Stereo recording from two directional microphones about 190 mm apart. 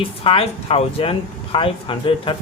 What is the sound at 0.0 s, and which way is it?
Speech, 30° left (ahead or behind).